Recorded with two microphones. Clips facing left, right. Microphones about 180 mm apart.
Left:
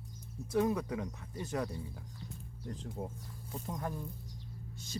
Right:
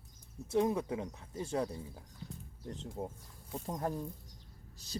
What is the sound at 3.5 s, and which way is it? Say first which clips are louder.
Speech: right 3 dB; 35° right (ahead or behind).